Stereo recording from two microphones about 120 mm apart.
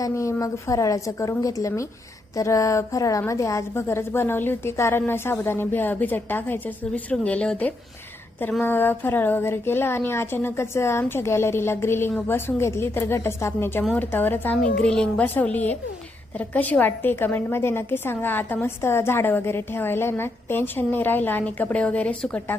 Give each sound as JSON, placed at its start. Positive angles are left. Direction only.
{"t": 0.0, "sound": "a woman's voice", "side_deg": 25}